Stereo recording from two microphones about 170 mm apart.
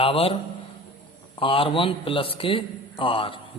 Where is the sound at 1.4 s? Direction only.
30° left (ahead or behind).